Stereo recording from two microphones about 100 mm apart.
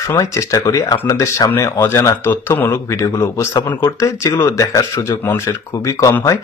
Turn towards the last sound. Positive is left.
turn(degrees=30)  # may be behind; listen again after turning